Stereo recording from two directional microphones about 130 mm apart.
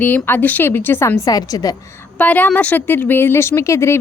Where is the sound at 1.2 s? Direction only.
30° left (ahead or behind).